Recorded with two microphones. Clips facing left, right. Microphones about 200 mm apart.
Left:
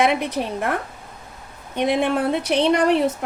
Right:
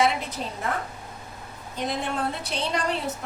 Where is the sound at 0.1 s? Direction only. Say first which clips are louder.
Left 9 dB; 65° left (ahead or behind).